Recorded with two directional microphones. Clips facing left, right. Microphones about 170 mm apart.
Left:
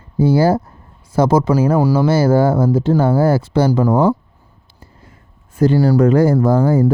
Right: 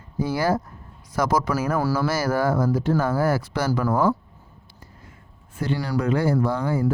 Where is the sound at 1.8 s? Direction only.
15° left (ahead or behind).